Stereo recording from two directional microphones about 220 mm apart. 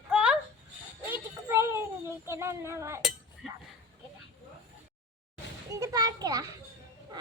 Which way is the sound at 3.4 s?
Centre (ahead or behind).